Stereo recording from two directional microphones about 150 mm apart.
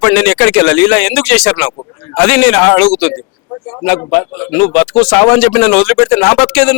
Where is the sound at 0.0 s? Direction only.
5° left (ahead or behind).